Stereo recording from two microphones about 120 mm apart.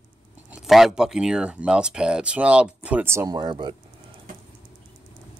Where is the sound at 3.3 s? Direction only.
40° right (ahead or behind).